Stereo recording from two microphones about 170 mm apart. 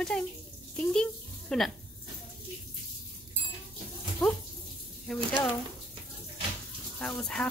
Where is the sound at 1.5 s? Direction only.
5° left (ahead or behind).